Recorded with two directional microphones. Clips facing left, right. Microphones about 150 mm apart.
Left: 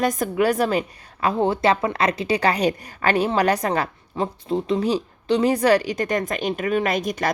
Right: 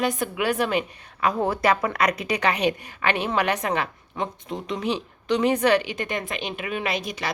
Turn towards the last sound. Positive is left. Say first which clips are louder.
# left 5 dB
turn(degrees=45)  # may be behind; listen again after turning